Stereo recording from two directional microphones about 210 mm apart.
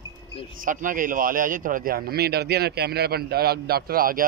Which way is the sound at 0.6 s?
40° right (ahead or behind).